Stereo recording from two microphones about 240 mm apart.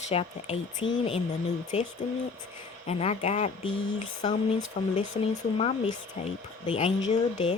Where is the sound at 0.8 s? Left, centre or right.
Left.